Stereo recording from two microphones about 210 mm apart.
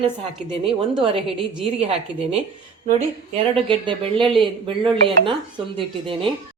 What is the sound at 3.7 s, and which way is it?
Speech, 25° right (ahead or behind).